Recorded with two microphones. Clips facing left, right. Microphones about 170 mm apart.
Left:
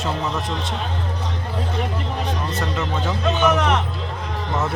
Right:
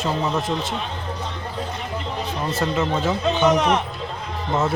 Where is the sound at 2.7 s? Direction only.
20° right (ahead or behind).